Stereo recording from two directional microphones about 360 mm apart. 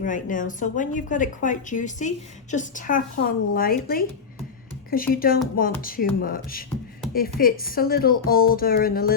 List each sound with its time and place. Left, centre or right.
0.0 s speech: left